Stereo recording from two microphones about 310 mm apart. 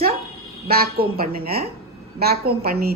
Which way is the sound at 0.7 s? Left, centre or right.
Right.